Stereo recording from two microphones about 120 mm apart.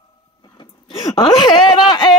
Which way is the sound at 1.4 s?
35° left (ahead or behind).